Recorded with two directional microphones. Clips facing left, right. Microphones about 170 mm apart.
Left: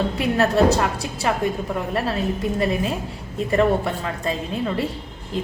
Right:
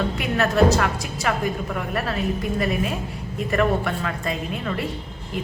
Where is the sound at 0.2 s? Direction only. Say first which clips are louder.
Left 2 dB; 30° left (ahead or behind).